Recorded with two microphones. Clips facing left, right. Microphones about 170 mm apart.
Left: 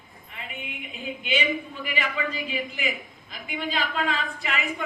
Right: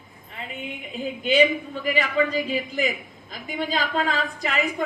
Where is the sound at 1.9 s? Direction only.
40° right (ahead or behind).